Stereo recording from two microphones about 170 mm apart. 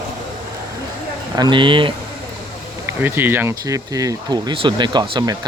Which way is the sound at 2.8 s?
15° right (ahead or behind).